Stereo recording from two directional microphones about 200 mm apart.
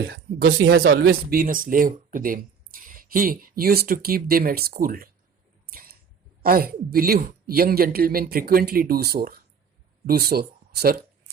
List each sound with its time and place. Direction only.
0.1 s speech: 50° right (ahead or behind)
5.6 s a sound: 50° right (ahead or behind)
6.4 s speech: 45° right (ahead or behind)